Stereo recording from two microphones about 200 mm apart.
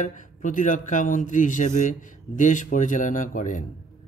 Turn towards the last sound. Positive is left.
turn(degrees=40)  # may be behind; listen again after turning